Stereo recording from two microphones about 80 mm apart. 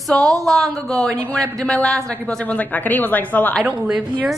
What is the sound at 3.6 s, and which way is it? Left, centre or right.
Speech, centre.